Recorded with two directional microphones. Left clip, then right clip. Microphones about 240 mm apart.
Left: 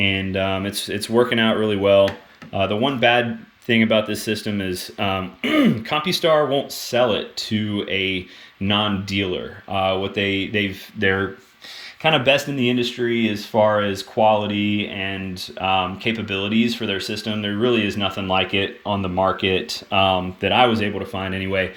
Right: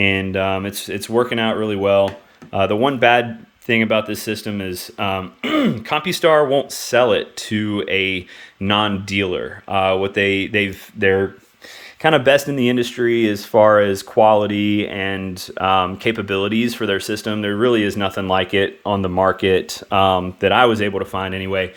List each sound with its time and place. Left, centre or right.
0.0 s speech: centre
19.1 s speech: right
19.5 s speech: centre